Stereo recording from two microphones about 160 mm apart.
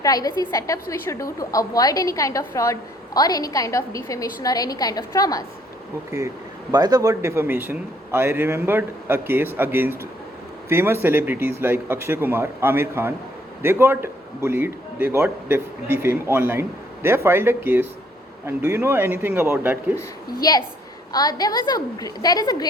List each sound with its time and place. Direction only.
0.0 s a woman's voice: 25° left (ahead or behind)
6.1 s a man's voice: 20° right (ahead or behind)
20.4 s a woman's voice: 25° left (ahead or behind)